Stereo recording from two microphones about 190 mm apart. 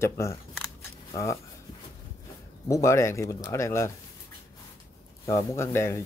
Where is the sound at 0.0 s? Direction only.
15° left (ahead or behind).